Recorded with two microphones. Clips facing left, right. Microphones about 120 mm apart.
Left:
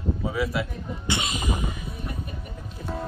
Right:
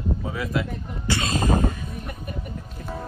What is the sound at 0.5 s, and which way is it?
Speech, 5° left (ahead or behind).